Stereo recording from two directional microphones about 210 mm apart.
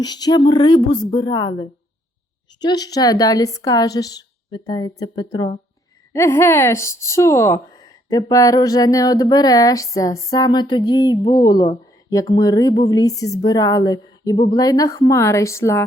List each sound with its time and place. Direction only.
0.0 s speech: 20° left (ahead or behind)